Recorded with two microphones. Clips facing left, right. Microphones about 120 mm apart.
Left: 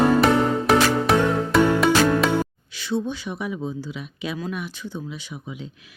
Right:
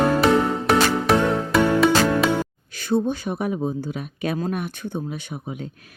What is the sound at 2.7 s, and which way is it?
Speech, 50° right (ahead or behind).